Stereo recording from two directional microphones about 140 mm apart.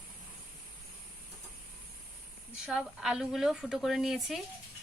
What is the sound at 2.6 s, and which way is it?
A woman's voice, 5° right (ahead or behind).